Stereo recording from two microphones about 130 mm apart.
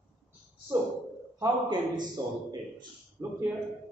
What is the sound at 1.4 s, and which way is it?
Speech, 35° right (ahead or behind).